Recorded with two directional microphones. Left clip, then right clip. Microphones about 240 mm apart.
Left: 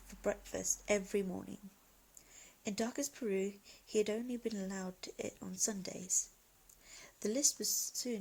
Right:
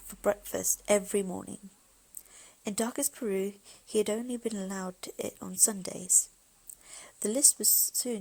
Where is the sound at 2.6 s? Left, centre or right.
Centre.